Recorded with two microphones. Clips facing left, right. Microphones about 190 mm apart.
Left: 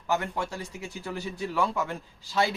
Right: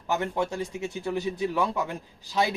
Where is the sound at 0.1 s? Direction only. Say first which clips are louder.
Right 2 dB; 20° right (ahead or behind).